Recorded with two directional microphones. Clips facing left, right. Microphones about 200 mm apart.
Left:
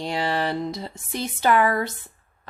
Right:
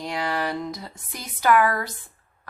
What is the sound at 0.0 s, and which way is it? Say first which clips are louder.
Speech: left 2 dB; 30° left (ahead or behind).